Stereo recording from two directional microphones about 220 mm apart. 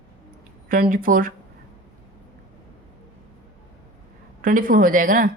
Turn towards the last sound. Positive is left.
turn(degrees=-40)  # may be behind; listen again after turning